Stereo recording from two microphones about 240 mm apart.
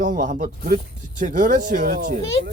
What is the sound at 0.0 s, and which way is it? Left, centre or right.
Speech, right.